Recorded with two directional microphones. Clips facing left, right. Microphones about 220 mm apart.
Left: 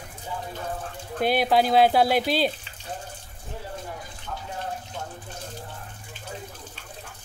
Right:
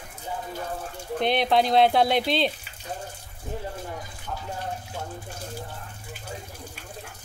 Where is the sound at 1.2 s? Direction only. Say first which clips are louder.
Left 1 dB; 5° left (ahead or behind).